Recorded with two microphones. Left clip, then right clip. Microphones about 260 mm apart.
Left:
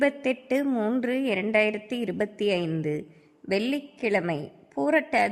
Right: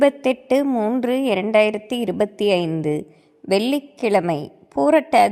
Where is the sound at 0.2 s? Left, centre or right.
Right.